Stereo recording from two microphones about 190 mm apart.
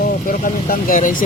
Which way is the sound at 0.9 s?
45° left (ahead or behind).